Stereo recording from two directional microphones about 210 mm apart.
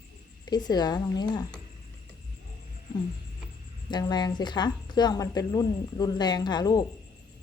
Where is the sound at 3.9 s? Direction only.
20° left (ahead or behind).